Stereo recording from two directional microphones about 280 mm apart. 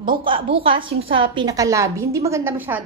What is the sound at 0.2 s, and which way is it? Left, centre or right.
A woman's voice, centre.